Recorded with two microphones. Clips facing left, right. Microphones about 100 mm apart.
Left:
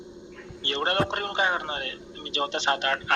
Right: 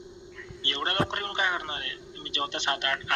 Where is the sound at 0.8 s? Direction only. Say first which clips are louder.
Left 3 dB; 30° left (ahead or behind).